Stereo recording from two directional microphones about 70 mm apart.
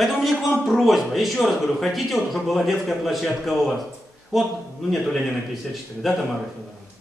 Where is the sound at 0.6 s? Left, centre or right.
Centre.